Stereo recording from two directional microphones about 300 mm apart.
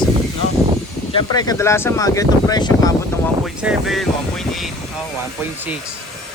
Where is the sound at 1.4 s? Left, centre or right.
Centre.